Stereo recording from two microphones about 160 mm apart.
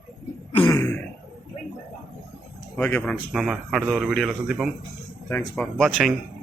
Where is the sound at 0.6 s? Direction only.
20° left (ahead or behind).